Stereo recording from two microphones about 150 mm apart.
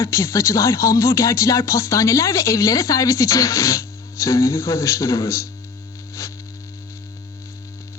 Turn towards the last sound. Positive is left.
turn(degrees=20)  # may be behind; listen again after turning